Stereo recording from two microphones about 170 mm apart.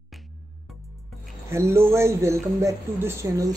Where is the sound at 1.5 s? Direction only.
15° right (ahead or behind).